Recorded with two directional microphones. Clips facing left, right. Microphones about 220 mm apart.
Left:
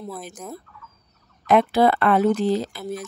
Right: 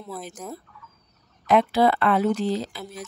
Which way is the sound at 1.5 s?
50° left (ahead or behind).